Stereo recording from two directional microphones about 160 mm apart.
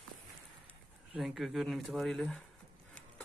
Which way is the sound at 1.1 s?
Centre (ahead or behind).